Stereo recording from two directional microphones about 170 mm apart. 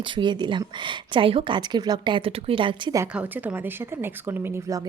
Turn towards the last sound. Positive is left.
turn(degrees=-15)  # may be behind; listen again after turning